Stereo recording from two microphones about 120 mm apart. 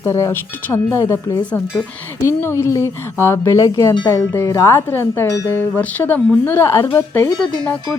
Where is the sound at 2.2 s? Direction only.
20° left (ahead or behind).